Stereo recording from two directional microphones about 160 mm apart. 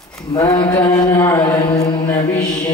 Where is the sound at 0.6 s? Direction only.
10° left (ahead or behind).